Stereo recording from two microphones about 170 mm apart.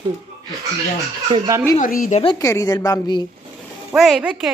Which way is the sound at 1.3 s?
30° right (ahead or behind).